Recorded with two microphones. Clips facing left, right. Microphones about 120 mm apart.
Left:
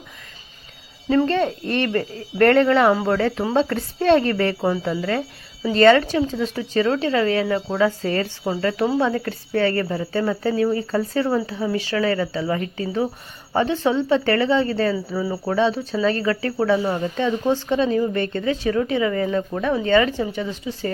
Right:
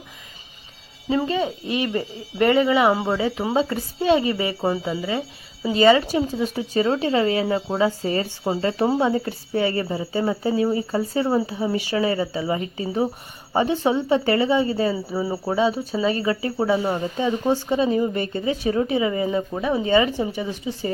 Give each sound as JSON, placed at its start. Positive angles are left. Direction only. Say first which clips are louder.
{"t": 1.1, "sound": "speech", "louder": "left 3 dB", "side_deg": -10}